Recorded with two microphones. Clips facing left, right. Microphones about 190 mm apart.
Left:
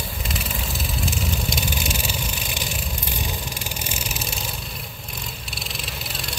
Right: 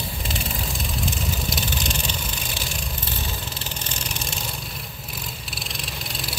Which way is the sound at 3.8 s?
10° left (ahead or behind).